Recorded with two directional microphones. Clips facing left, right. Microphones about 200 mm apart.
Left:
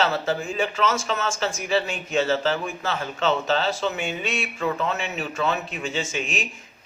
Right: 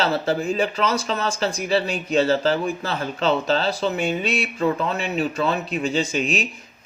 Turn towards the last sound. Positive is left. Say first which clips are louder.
# right 5 dB
turn(degrees=-35)  # may be behind; listen again after turning